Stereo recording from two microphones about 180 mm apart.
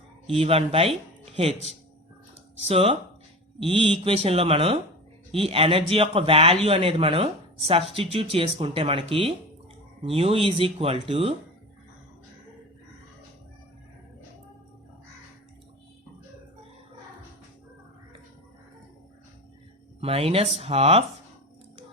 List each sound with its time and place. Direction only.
0.3 s a man's voice: 30° right (ahead or behind)
20.0 s a man's voice: 35° right (ahead or behind)